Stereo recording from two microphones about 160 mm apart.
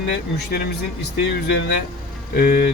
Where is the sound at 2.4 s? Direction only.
65° left (ahead or behind).